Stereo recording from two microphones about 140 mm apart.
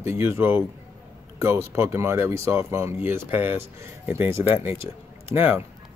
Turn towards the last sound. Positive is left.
turn(degrees=-10)  # may be behind; listen again after turning